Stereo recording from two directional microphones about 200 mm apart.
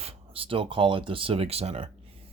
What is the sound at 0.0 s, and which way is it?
Speech, 30° right (ahead or behind).